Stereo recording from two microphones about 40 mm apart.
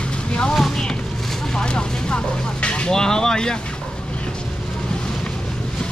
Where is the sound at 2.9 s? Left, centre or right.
Centre.